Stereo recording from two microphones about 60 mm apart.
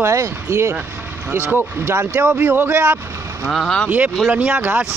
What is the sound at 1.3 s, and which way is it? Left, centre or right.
Speech, right.